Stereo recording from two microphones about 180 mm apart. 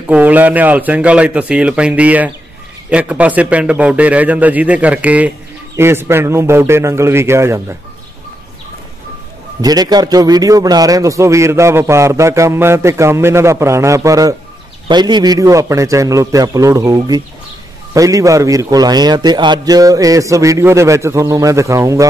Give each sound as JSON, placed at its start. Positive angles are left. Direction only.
{"t": 0.1, "sound": "a man's voice", "side_deg": -10}
{"t": 9.6, "sound": "a man's voice", "side_deg": -20}